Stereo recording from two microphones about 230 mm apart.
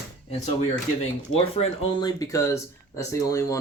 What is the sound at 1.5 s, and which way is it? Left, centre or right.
Speech, centre.